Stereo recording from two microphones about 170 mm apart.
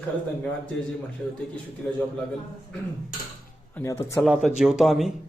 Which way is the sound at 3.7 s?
15° left (ahead or behind).